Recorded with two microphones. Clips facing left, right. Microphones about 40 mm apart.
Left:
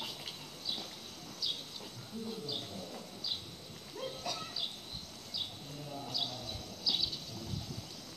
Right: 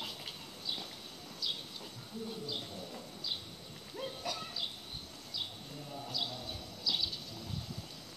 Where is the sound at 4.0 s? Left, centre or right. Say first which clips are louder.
Even; centre.